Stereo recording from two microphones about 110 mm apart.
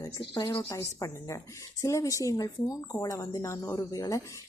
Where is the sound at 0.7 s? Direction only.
30° left (ahead or behind).